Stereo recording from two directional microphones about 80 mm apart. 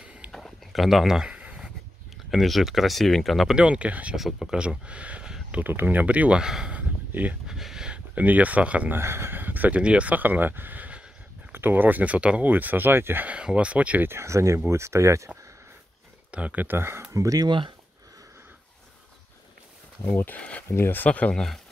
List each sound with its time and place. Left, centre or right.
0.0 s a sound: centre
0.3 s a sound: centre
2.3 s speech: centre
5.6 s speech: right
8.9 s speech: right
13.3 s speech: centre
14.0 s speech: right
16.3 s speech: centre; by 17.5 s right
17.5 s speech: right
20.1 s speech: left
20.3 s speech: centre
20.6 s speech: left; by 21.5 s centre